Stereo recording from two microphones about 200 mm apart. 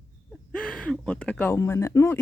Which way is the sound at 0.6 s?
5° left (ahead or behind).